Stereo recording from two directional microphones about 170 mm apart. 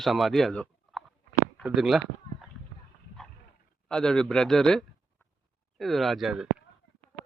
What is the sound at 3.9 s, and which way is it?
Speech, 5° left (ahead or behind).